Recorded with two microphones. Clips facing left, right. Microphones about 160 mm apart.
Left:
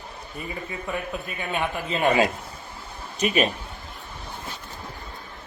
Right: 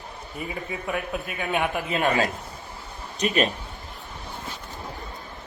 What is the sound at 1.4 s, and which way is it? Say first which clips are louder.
Speech: right 2 dB; 15° right (ahead or behind).